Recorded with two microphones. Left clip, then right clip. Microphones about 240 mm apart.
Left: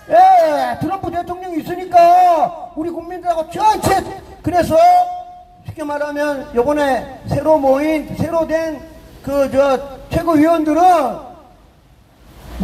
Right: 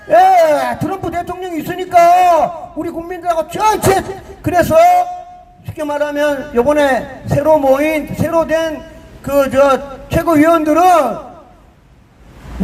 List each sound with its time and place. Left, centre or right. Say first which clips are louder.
0.1 s a man's voice: right 1 dB; right